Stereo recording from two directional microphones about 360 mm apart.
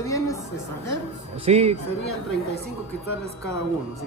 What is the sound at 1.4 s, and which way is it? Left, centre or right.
Speech, centre.